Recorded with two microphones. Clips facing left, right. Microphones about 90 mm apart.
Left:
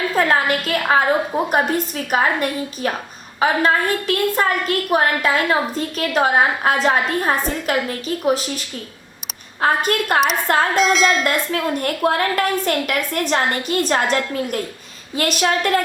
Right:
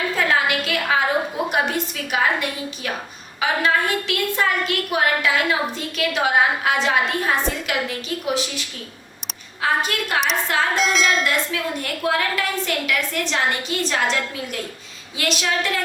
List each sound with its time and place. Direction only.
0.2 s a woman's voice: 40° left (ahead or behind)
10.8 s a sound: centre (ahead or behind)
11.2 s a woman's voice: 45° left (ahead or behind)
15.2 s a woman's voice: 45° left (ahead or behind)